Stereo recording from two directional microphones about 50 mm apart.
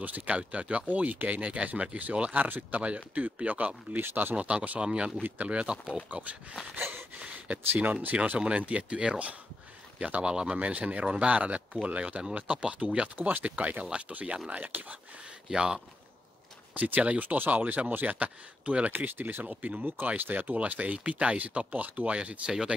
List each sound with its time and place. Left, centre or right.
0.0 s speech: right
4.0 s speech: right
4.4 s speech: right
6.8 s a sound: right
7.2 s speech: right
15.5 s speech: centre
16.7 s speech: right
18.9 s speech: right
19.4 s speech: right